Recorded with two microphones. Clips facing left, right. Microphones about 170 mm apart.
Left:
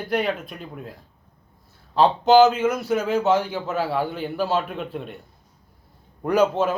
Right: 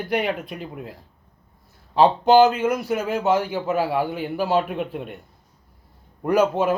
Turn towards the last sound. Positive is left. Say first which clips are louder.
# right 1 dB
turn(degrees=-10)  # may be behind; listen again after turning